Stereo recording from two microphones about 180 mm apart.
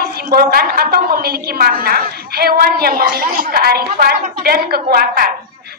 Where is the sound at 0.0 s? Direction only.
55° right (ahead or behind).